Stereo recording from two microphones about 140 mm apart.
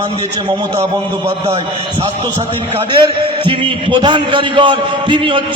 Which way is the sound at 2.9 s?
40° right (ahead or behind).